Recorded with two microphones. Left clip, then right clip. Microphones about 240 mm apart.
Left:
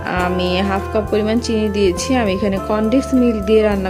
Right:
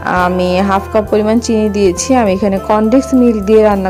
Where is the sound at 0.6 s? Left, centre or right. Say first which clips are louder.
Right 7 dB; centre.